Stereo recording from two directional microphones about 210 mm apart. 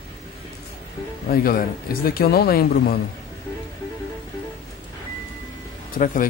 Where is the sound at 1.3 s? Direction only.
45° left (ahead or behind).